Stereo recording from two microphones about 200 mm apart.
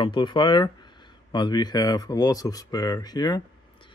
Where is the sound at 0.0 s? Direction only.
25° left (ahead or behind).